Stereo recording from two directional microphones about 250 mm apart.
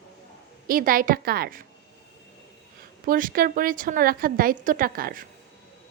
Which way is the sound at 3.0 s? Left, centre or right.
Right.